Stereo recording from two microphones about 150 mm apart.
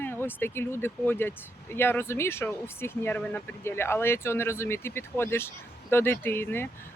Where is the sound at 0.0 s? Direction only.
15° left (ahead or behind).